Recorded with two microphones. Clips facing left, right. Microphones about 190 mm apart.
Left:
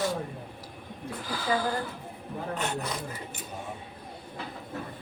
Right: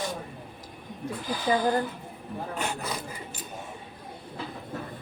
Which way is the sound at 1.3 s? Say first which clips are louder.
Right 4 dB; 20° right (ahead or behind).